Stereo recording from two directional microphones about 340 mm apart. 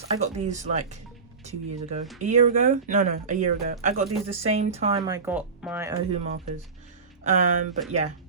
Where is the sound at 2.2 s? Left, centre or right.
Right.